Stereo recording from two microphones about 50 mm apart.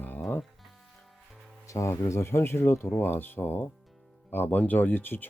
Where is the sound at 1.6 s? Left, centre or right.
Left.